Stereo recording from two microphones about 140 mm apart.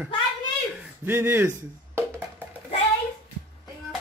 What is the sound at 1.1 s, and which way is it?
Speech, 15° right (ahead or behind).